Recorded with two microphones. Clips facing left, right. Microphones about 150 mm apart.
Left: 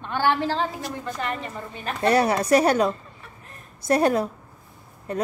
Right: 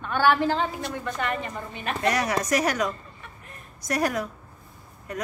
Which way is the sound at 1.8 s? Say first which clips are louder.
Left 5 dB; 30° left (ahead or behind).